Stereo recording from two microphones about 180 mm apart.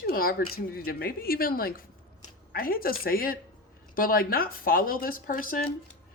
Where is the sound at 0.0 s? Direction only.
55° left (ahead or behind).